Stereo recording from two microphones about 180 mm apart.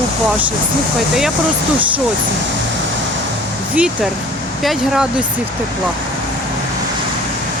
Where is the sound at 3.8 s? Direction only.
5° right (ahead or behind).